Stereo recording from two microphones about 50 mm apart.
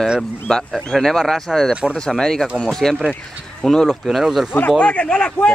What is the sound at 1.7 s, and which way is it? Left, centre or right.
Speech, right.